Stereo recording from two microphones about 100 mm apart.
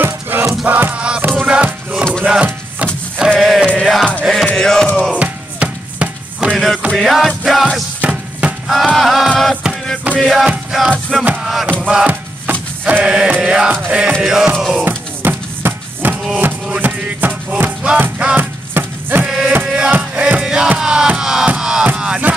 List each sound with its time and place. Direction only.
0.0 s music: 20° right (ahead or behind)
3.3 s music: centre (ahead or behind)
5.1 s music: 15° right (ahead or behind)
6.5 s music: centre (ahead or behind)
8.0 s a sound: 15° right (ahead or behind)
8.7 s music: centre (ahead or behind)
14.9 s music: 20° right (ahead or behind)
19.2 s music: 10° right (ahead or behind)